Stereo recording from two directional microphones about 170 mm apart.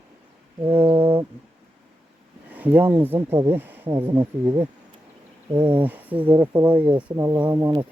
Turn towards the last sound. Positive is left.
turn(degrees=-20)  # may be behind; listen again after turning